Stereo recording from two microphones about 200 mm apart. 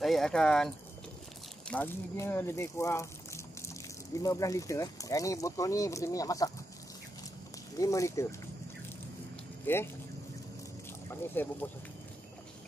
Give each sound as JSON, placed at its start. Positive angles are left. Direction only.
{"t": 0.0, "sound": "speech", "side_deg": 0}
{"t": 1.7, "sound": "speech", "side_deg": 10}
{"t": 7.7, "sound": "speech", "side_deg": 15}
{"t": 9.7, "sound": "speech", "side_deg": 10}
{"t": 11.1, "sound": "speech", "side_deg": 10}